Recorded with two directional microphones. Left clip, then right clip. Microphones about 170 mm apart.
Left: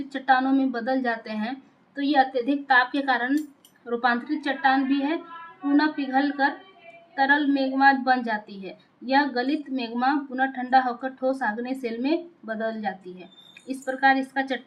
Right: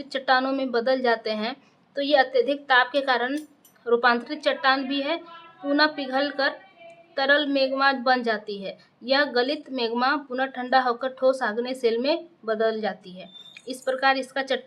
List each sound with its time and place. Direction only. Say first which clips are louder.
0.1 s a woman's voice: left 1 dB; 25° right (ahead or behind)